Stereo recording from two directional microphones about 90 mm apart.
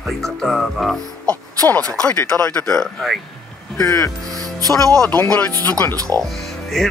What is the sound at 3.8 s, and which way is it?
Speech, 40° left (ahead or behind).